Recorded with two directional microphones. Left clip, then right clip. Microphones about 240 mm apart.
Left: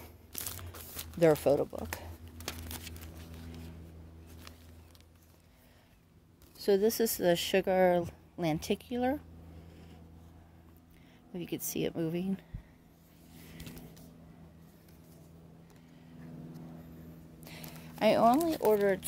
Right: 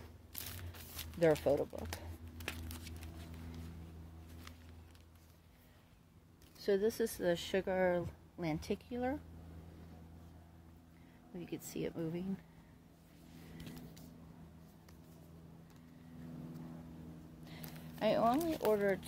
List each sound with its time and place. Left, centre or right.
1.2 s speech: left
2.3 s a sound: centre
6.6 s speech: left
11.3 s speech: left
17.5 s a sound: left
18.7 s speech: left